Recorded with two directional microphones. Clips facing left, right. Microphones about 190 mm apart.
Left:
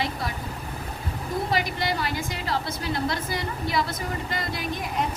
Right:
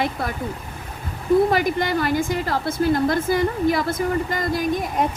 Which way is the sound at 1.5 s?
50° right (ahead or behind).